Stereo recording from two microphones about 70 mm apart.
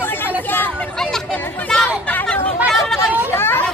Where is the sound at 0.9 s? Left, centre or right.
Centre.